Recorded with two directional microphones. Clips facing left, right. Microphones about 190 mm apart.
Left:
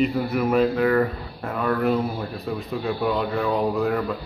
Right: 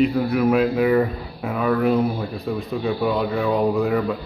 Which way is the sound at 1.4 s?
Centre (ahead or behind).